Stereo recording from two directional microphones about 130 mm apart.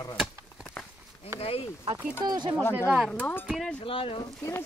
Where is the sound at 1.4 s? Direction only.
50° left (ahead or behind).